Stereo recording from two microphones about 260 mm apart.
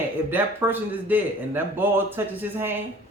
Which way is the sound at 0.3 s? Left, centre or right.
Centre.